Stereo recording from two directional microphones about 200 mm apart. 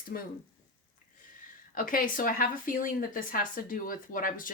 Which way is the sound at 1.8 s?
45° left (ahead or behind).